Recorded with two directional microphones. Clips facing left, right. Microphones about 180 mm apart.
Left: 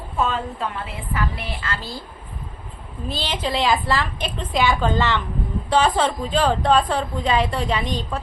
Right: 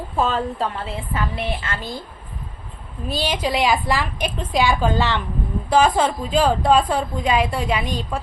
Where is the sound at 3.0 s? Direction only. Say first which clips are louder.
Right 3 dB; 15° right (ahead or behind).